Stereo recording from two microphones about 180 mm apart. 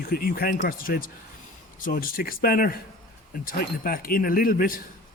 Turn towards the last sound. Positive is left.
turn(degrees=50)  # may be behind; listen again after turning